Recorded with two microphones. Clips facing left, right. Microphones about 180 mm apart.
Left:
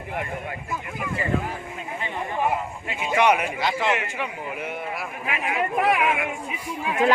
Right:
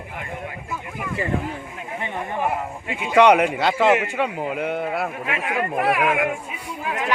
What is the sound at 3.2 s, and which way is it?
A man's voice, 65° right (ahead or behind).